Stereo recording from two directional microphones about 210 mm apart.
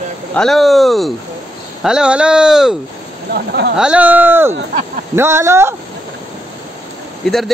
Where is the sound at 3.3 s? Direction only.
50° right (ahead or behind).